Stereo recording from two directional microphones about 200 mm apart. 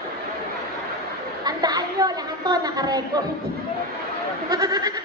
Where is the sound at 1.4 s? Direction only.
20° right (ahead or behind).